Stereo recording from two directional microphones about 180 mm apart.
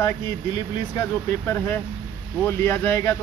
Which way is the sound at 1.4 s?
15° left (ahead or behind).